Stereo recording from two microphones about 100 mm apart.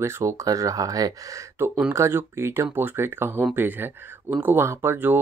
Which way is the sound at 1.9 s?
25° right (ahead or behind).